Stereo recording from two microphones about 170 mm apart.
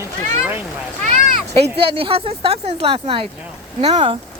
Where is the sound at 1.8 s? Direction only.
35° right (ahead or behind).